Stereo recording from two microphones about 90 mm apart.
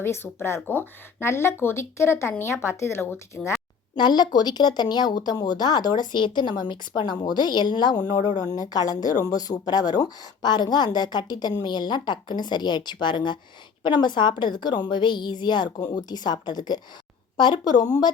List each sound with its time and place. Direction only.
0.0 s speech: 30° left (ahead or behind)
3.9 s a woman's voice: 55° left (ahead or behind)